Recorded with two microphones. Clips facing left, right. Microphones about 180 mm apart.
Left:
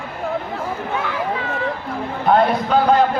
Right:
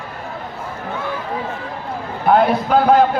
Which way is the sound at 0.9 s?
90° left.